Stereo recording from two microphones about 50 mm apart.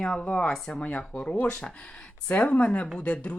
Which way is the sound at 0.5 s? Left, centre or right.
Centre.